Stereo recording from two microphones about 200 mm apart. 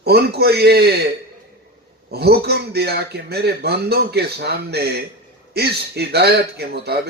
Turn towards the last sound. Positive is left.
turn(degrees=-50)  # may be behind; listen again after turning